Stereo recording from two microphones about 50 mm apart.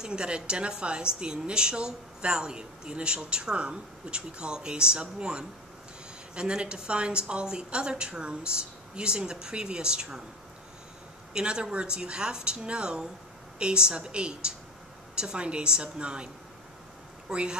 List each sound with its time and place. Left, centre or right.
0.0 s a woman's voice: centre
11.3 s a woman's voice: centre
17.3 s a woman's voice: centre